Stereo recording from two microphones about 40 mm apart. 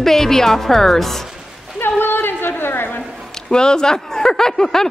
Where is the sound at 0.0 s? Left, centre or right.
Centre.